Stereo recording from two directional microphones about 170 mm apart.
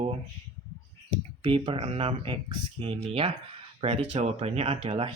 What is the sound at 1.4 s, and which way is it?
Speech, 30° right (ahead or behind).